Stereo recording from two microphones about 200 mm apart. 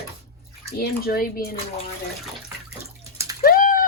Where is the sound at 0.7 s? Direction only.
50° left (ahead or behind).